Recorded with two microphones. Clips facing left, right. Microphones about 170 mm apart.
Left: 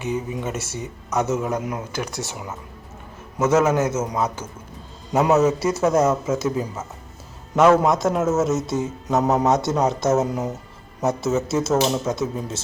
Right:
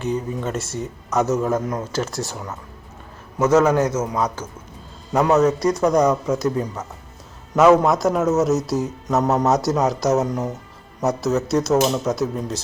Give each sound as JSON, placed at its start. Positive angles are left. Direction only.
{"t": 0.0, "sound": "a man's voice", "side_deg": 5}
{"t": 1.6, "sound": "speech", "side_deg": 10}
{"t": 2.0, "sound": "a man's voice", "side_deg": 0}
{"t": 3.8, "sound": "a man's voice", "side_deg": 25}
{"t": 5.1, "sound": "a man's voice", "side_deg": 5}